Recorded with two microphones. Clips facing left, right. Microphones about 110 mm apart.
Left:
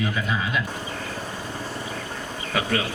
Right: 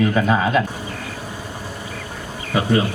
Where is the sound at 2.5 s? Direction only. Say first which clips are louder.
Right 5 dB; 25° right (ahead or behind).